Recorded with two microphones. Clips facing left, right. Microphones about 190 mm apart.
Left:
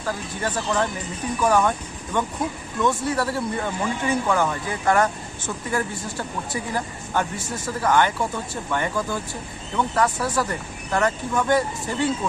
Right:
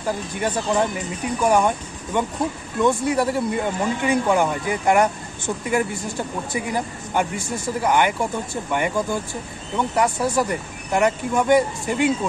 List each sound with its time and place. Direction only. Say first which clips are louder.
0.0 s speech: right 3 dB; 15° right (ahead or behind)